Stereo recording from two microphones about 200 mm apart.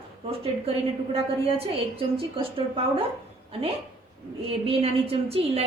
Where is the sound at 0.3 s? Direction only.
30° right (ahead or behind).